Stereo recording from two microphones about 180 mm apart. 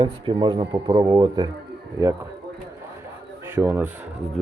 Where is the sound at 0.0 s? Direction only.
30° right (ahead or behind).